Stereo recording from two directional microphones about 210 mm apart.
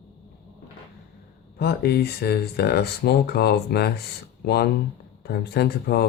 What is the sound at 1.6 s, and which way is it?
Speech, 50° left (ahead or behind).